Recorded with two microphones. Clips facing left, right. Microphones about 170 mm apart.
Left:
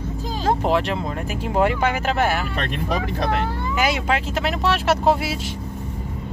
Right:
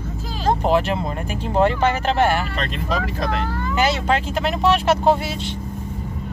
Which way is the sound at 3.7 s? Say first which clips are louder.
Right 2 dB; 10° left (ahead or behind).